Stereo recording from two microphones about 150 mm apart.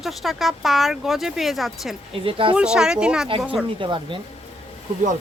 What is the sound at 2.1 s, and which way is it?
Speech, 35° right (ahead or behind).